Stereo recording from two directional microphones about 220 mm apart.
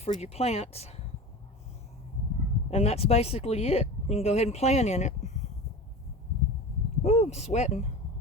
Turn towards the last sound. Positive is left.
turn(degrees=30)  # may be behind; listen again after turning